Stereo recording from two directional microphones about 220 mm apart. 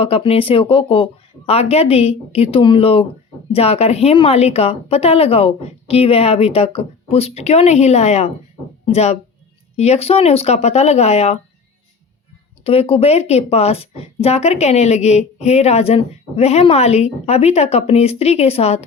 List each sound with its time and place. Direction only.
0.0 s a woman's voice: 25° left (ahead or behind)
12.6 s a woman's voice: 25° left (ahead or behind)